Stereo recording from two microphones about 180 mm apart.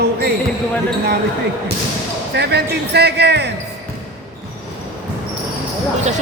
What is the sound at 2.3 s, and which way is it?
Speech, 70° right (ahead or behind).